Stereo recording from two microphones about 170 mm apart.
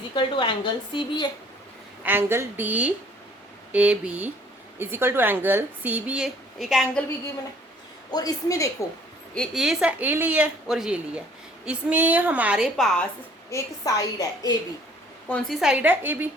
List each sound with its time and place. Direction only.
0.1 s speech: 30° left (ahead or behind)
2.0 s a woman's voice: 15° right (ahead or behind)
8.1 s speech: 20° left (ahead or behind)
9.3 s a woman's voice: centre (ahead or behind)
13.5 s speech: 20° left (ahead or behind)
15.3 s a woman's voice: 5° left (ahead or behind)